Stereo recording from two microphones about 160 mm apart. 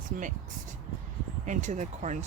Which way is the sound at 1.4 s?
50° right (ahead or behind).